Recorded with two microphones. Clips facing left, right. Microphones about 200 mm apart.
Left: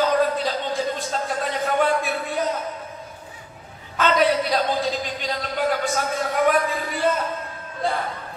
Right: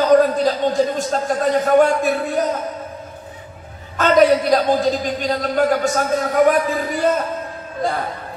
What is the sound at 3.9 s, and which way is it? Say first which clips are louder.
A man's voice: right 6 dB; 45° right (ahead or behind).